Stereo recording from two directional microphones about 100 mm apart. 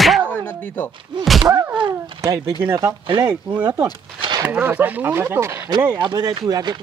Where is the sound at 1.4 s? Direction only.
30° right (ahead or behind).